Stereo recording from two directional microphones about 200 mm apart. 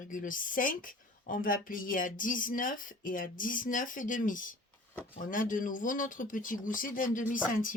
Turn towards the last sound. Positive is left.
turn(degrees=40)  # may be behind; listen again after turning